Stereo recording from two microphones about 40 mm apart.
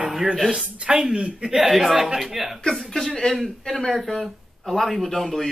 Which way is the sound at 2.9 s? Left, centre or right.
Centre.